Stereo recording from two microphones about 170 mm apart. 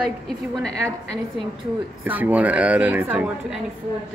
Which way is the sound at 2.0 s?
10° right (ahead or behind).